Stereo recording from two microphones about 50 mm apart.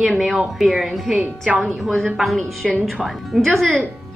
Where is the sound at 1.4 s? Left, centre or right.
Right.